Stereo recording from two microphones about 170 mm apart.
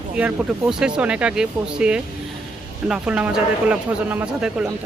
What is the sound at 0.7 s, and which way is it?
Speech, 5° right (ahead or behind).